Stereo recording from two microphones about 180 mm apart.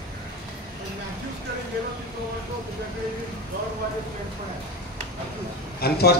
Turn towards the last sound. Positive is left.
turn(degrees=60)  # may be behind; listen again after turning